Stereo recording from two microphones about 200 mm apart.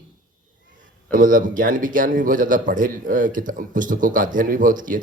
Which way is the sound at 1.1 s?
40° right (ahead or behind).